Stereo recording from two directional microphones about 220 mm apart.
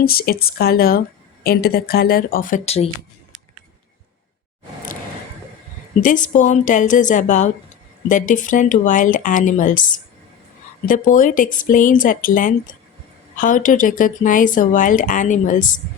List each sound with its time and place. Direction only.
0.0 s speech: 45° left (ahead or behind)
6.0 s speech: 35° left (ahead or behind)
10.8 s speech: 40° left (ahead or behind)